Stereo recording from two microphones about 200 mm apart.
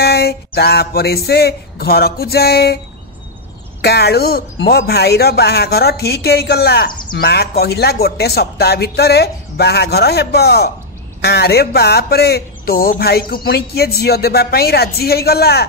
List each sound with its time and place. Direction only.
0.0 s speech: 50° left (ahead or behind)
3.8 s speech: 55° left (ahead or behind)